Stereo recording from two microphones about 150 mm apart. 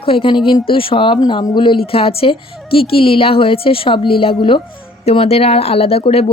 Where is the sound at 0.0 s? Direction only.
35° left (ahead or behind).